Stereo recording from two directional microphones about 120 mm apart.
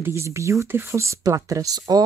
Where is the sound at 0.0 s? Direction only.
20° right (ahead or behind).